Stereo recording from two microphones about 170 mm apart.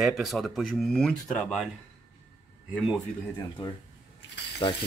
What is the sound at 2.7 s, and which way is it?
Speech, 5° right (ahead or behind).